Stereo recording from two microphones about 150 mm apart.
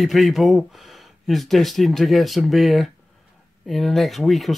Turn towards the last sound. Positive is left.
turn(degrees=0)  # may be behind; listen again after turning